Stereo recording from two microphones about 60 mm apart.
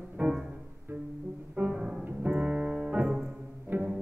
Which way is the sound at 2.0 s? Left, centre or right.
Centre.